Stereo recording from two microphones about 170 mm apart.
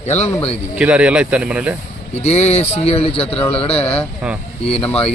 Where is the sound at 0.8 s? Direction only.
5° right (ahead or behind).